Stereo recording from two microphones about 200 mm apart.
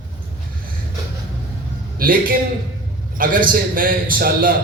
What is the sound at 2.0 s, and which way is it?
A man's voice, 45° right (ahead or behind).